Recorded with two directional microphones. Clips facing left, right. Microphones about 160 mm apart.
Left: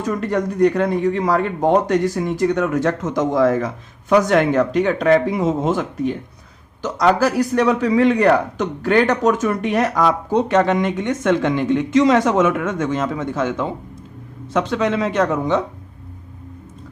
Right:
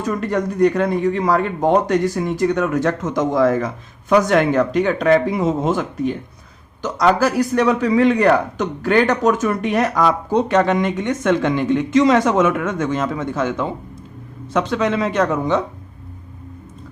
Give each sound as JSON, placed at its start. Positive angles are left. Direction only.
{"t": 0.0, "sound": "a man's voice", "side_deg": 30}